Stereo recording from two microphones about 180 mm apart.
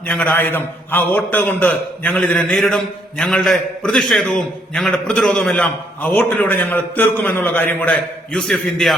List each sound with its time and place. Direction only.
0.1 s a man's voice: 10° left (ahead or behind)